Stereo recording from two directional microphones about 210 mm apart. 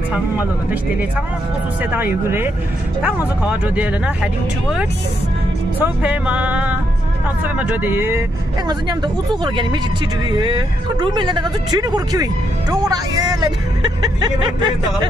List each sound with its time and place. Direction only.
0.1 s speech: 5° right (ahead or behind)
1.8 s speech: 10° right (ahead or behind)
5.8 s speech: 5° right (ahead or behind)
8.6 s speech: 20° right (ahead or behind)